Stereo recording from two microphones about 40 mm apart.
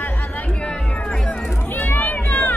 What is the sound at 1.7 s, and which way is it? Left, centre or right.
Music, left.